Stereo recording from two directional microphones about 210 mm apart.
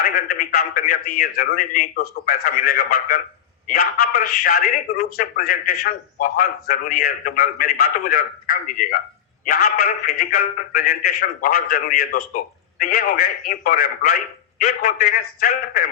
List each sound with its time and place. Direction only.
0.0 s a man's voice: 45° left (ahead or behind)
4.2 s a man's voice: 45° left (ahead or behind)